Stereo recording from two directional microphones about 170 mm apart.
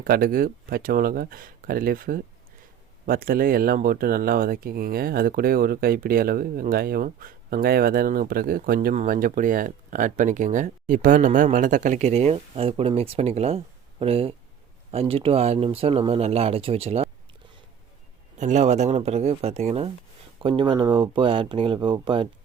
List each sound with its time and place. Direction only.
0.0 s speech: 55° right (ahead or behind); by 17.1 s 35° right (ahead or behind)
18.3 s speech: 45° right (ahead or behind); by 22.3 s 30° right (ahead or behind)